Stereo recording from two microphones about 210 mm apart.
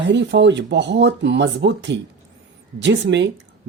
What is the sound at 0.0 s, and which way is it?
Speech, 55° right (ahead or behind).